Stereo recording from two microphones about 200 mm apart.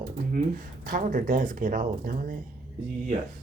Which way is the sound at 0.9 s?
40° right (ahead or behind).